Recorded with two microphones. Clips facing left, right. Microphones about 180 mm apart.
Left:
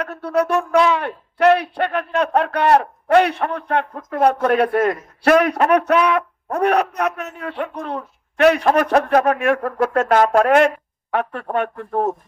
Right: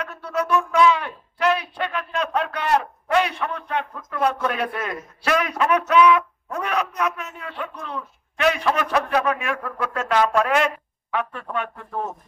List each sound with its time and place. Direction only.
0.0 s speech: 60° left (ahead or behind); by 10.4 s 40° left (ahead or behind)
10.4 s speech: 55° left (ahead or behind)